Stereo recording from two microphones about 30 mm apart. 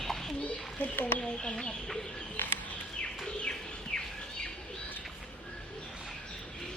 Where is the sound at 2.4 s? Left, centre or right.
Left.